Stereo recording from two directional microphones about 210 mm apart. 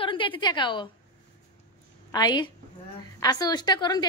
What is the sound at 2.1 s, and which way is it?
A woman's voice, 20° left (ahead or behind).